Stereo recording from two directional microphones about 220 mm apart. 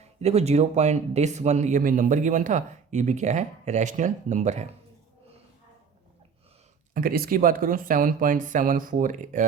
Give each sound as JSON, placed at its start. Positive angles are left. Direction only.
{"t": 0.2, "sound": "speech", "side_deg": -30}
{"t": 6.9, "sound": "speech", "side_deg": -40}